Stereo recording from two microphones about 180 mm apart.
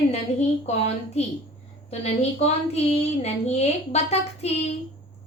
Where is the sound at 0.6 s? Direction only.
35° left (ahead or behind).